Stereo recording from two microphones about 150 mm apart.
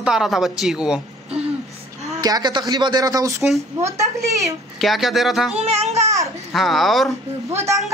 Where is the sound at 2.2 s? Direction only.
25° right (ahead or behind).